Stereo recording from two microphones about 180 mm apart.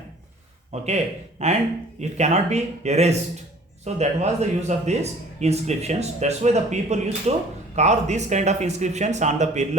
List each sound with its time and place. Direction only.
0.7 s speech: 35° right (ahead or behind)